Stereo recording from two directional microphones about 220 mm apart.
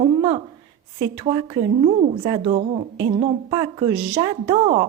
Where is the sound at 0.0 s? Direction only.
25° right (ahead or behind).